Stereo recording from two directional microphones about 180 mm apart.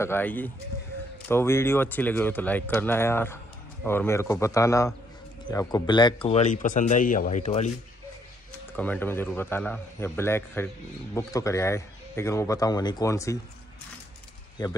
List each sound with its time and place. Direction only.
0.0 s speech: 10° left (ahead or behind)
6.2 s speech: 40° left (ahead or behind)
8.7 s speech: 10° left (ahead or behind)
14.6 s speech: 25° left (ahead or behind)